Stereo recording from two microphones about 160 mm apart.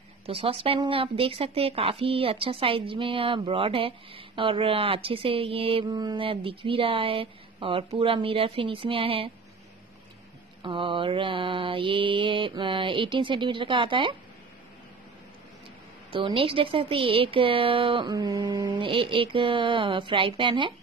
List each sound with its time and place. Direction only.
0.3 s speech: 35° right (ahead or behind)
10.6 s speech: 30° right (ahead or behind)
16.1 s speech: 30° right (ahead or behind)